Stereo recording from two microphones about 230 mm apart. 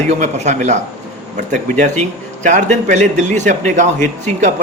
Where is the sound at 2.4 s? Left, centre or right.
Right.